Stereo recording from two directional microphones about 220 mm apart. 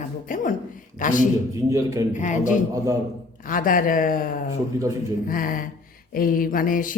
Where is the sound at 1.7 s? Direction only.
15° right (ahead or behind).